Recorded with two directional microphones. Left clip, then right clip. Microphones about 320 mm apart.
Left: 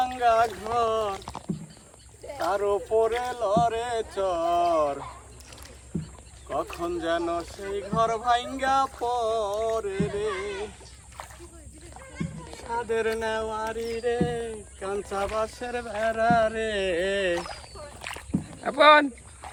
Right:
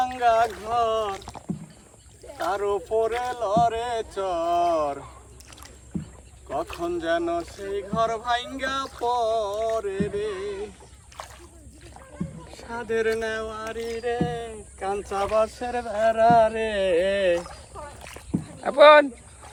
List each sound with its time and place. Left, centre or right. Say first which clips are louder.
0.0 s speech: right 1 dB; centre
2.5 s speech: even; centre
6.5 s speech: right 1 dB; centre
11.2 s rowboat: right 2 dB; centre
12.1 s speech: left 1 dB; centre
13.7 s speech: even; centre
18.6 s speech: right 4 dB; centre